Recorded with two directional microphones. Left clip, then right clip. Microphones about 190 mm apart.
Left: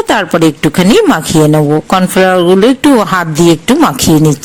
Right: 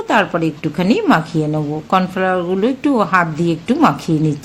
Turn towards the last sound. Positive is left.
turn(degrees=40)  # may be behind; listen again after turning